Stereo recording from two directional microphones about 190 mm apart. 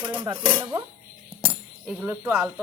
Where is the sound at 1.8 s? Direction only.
5° right (ahead or behind).